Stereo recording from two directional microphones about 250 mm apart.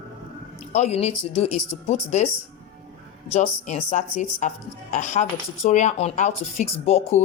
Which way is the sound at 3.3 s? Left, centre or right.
Left.